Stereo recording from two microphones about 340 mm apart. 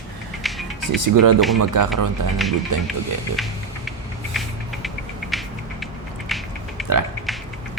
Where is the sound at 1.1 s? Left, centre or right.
Right.